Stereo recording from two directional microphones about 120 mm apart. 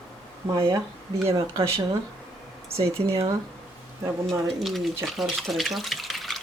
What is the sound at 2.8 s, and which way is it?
Speech, 25° right (ahead or behind).